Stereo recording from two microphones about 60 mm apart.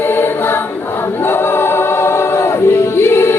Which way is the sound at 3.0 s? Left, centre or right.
Left.